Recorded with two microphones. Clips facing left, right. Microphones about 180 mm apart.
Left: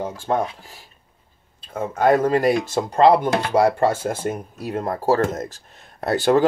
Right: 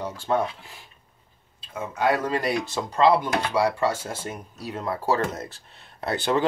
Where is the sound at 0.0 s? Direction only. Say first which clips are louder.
Left 2 dB; 45° left (ahead or behind).